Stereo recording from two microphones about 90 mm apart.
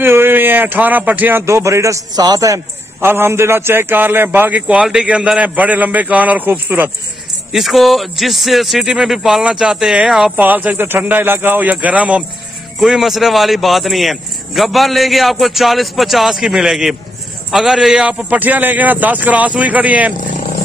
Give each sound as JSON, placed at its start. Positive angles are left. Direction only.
{"t": 0.0, "sound": "speech", "side_deg": -25}
{"t": 1.4, "sound": "a man's voice", "side_deg": -30}
{"t": 2.1, "sound": "a man's voice", "side_deg": -45}
{"t": 3.0, "sound": "a man's voice", "side_deg": -25}
{"t": 7.5, "sound": "speech", "side_deg": 0}
{"t": 10.3, "sound": "speech", "side_deg": -20}
{"t": 12.7, "sound": "a man's voice", "side_deg": -5}